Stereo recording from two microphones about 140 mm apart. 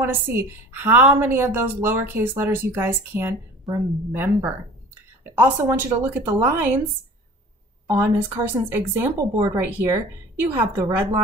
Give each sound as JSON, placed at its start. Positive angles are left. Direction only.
{"t": 0.0, "sound": "a woman's voice", "side_deg": -15}
{"t": 7.9, "sound": "a woman's voice", "side_deg": -15}